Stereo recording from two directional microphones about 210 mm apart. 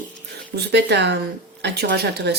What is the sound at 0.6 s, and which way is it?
Speech, 55° right (ahead or behind).